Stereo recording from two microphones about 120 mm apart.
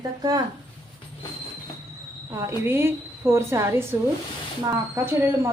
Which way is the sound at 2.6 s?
20° right (ahead or behind).